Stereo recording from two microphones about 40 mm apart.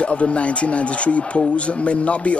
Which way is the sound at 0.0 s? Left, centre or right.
Left.